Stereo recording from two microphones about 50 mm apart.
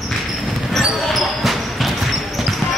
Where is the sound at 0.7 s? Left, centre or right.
Centre.